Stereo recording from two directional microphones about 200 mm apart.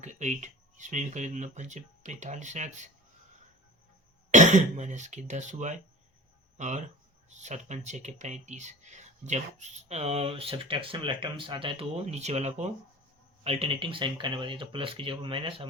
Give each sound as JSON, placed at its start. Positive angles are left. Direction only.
{"t": 0.0, "sound": "speech", "side_deg": -35}
{"t": 4.3, "sound": "speech", "side_deg": -40}